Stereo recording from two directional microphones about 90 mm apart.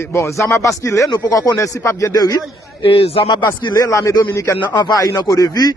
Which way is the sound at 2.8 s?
80° left.